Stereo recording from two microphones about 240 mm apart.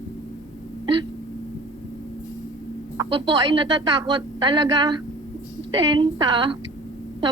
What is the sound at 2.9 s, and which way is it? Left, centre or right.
A woman's voice, centre.